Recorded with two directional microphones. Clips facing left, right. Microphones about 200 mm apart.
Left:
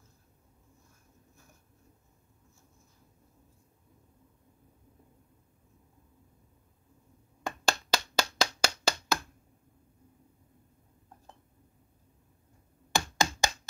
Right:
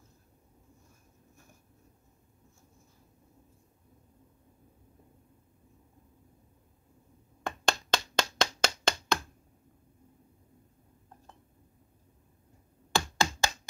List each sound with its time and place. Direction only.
7.4 s clapping: 5° left (ahead or behind)
12.9 s finger snapping: 15° left (ahead or behind)